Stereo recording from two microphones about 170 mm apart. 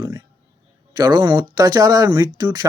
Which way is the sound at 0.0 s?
20° right (ahead or behind).